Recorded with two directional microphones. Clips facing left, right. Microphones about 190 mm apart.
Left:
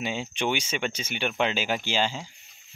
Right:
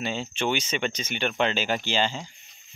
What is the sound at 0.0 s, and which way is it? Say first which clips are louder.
Speech: right 1 dB; 10° left (ahead or behind).